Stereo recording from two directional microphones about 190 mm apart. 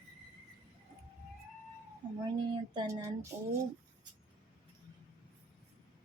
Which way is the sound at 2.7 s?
20° right (ahead or behind).